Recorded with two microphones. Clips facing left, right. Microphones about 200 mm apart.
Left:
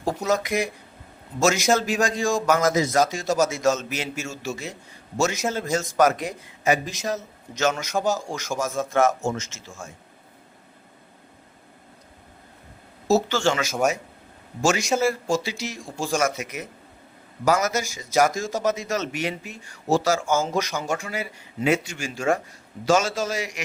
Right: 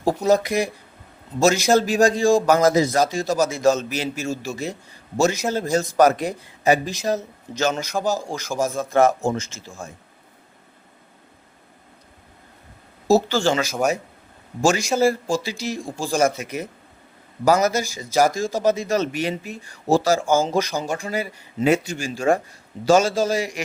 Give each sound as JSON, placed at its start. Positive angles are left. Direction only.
{"t": 0.0, "sound": "a man's voice", "side_deg": -35}
{"t": 13.2, "sound": "a man's voice", "side_deg": -35}